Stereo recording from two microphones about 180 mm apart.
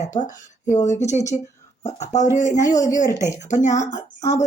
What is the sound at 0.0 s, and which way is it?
Speech, 45° left (ahead or behind).